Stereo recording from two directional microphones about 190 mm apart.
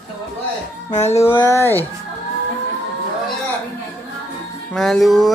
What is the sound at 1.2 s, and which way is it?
Speech, 15° left (ahead or behind).